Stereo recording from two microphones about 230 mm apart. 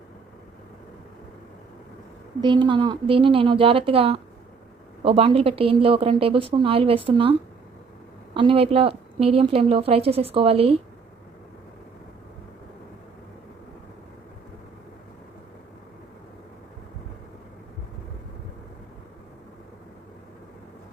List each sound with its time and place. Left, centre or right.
2.4 s speech: centre